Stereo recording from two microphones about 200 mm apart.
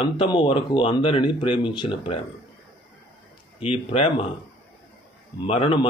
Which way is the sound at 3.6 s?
30° left (ahead or behind).